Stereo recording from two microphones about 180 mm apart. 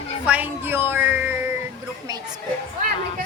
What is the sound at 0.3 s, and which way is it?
A woman's voice, 10° right (ahead or behind).